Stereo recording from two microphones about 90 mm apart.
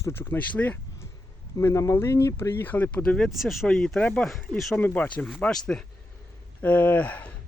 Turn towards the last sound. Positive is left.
turn(degrees=15)  # may be behind; listen again after turning